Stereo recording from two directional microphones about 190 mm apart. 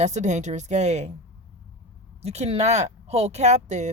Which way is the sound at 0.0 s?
40° right (ahead or behind).